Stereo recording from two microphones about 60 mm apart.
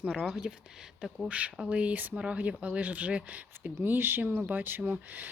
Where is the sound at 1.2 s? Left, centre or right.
Right.